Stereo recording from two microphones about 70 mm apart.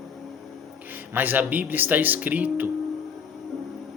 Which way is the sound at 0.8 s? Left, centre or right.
Right.